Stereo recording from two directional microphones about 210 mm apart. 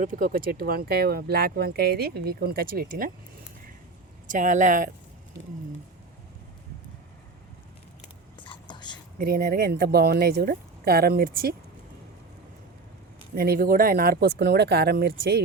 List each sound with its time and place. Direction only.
0.0 s speech: 40° right (ahead or behind)
4.3 s speech: 35° right (ahead or behind)
8.4 s whispering: 20° left (ahead or behind)
9.1 s speech: 45° right (ahead or behind)
13.3 s speech: 45° right (ahead or behind)